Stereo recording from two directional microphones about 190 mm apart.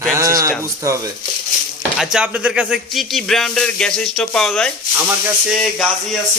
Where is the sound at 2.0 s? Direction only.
5° right (ahead or behind).